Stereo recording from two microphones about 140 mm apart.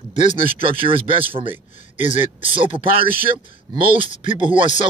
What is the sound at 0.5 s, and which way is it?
Speech, 40° right (ahead or behind).